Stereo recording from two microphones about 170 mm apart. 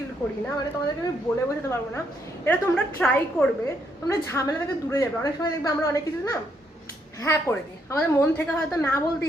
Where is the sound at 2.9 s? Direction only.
10° left (ahead or behind).